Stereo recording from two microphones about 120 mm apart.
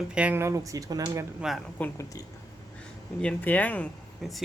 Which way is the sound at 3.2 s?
10° left (ahead or behind).